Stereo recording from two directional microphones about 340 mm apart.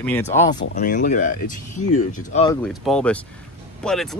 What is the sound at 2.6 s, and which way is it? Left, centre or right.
Speech, centre.